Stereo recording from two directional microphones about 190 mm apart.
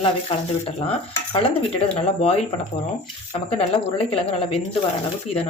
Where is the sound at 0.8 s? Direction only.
30° left (ahead or behind).